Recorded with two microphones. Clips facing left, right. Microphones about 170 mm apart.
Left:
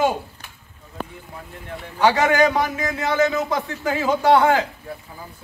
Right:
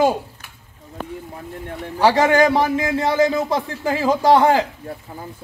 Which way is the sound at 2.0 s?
35° right (ahead or behind).